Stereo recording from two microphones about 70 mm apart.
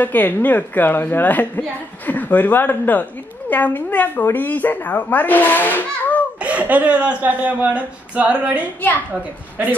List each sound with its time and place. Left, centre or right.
0.0 s a woman's voice: left
6.4 s a woman's voice: centre